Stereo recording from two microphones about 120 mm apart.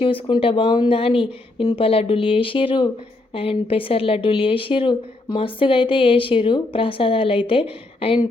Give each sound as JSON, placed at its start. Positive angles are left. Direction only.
{"t": 0.0, "sound": "speech", "side_deg": 50}